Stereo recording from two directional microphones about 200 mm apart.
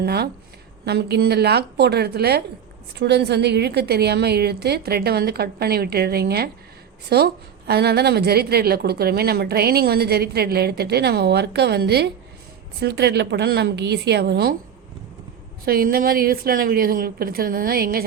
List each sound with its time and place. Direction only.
0.0 s a woman's voice: 55° right (ahead or behind)
15.6 s a woman's voice: 50° right (ahead or behind)